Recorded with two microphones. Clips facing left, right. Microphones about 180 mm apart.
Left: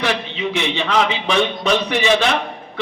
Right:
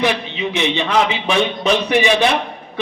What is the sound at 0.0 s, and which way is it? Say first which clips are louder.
A man's voice: right 2 dB; 15° right (ahead or behind).